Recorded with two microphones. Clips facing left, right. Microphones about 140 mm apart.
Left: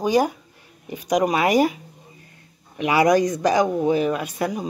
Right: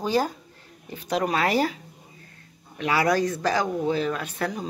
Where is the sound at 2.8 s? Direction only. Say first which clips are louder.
Left 5 dB; 15° left (ahead or behind).